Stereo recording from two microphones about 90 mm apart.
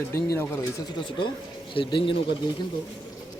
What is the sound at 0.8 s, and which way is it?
Speech, 60° left (ahead or behind).